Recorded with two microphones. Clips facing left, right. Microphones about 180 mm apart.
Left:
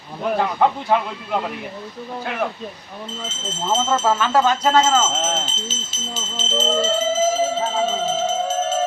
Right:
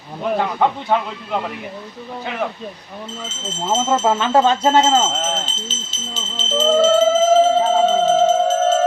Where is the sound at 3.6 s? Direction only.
5° right (ahead or behind).